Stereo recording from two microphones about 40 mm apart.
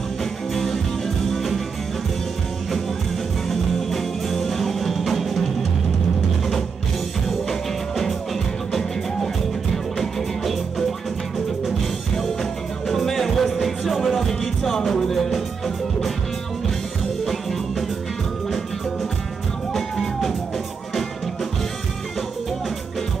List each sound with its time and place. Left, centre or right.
0.2 s music: centre
3.4 s music: centre
7.2 s music: centre
9.9 s music: centre
12.2 s music: centre
17.3 s music: centre
19.7 s music: centre